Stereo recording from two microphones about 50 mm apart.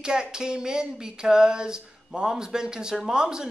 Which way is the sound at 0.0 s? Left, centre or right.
Centre.